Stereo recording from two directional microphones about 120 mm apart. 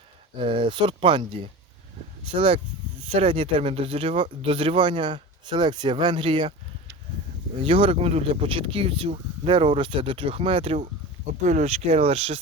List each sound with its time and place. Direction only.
0.3 s speech: 45° right (ahead or behind)
7.6 s speech: 50° right (ahead or behind)
11.4 s speech: 70° right (ahead or behind)